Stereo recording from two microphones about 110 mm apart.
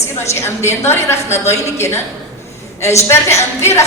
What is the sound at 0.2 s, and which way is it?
A woman's voice, 20° left (ahead or behind).